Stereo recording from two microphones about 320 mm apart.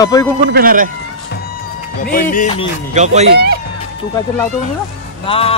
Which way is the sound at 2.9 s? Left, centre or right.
Right.